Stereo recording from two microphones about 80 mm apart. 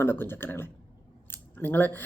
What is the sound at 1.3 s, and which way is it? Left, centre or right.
Scissors, left.